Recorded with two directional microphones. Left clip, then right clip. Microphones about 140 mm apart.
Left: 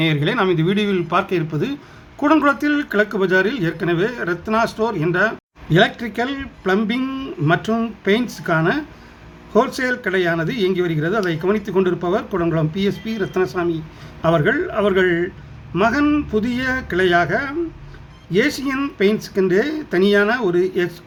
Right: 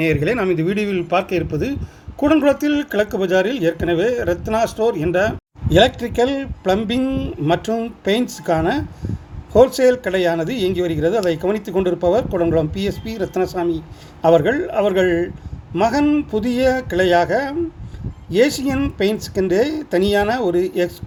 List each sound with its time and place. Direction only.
0.0 s speech: 10° right (ahead or behind)